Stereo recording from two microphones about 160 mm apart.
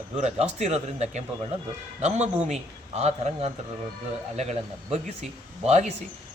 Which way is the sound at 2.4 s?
45° right (ahead or behind).